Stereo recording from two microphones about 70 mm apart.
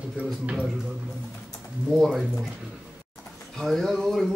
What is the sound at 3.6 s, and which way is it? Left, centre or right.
Speech, centre.